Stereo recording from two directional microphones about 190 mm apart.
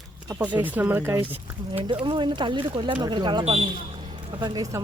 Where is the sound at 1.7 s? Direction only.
25° right (ahead or behind).